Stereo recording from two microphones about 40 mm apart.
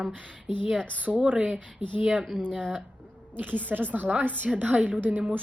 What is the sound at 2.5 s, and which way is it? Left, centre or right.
A woman's voice, right.